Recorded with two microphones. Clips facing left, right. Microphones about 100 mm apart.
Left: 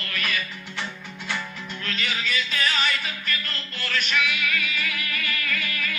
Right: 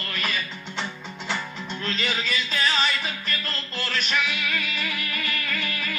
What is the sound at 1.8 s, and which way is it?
Music, 30° right (ahead or behind).